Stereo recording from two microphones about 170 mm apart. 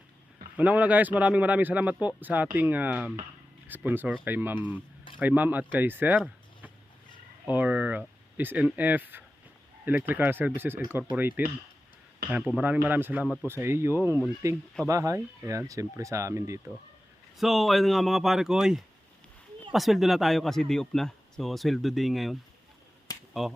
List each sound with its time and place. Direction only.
0.5 s speech: 10° right (ahead or behind)
7.4 s speech: 10° right (ahead or behind)
12.5 s speech: 10° right (ahead or behind)
17.3 s speech: centre (ahead or behind)